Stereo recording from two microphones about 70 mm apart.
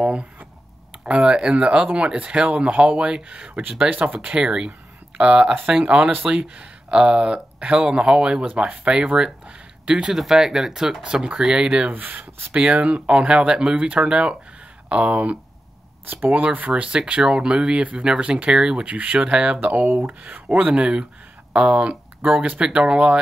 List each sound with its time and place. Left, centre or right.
0.0 s speech: centre
11.9 s speech: right
12.6 s speech: centre
16.1 s speech: right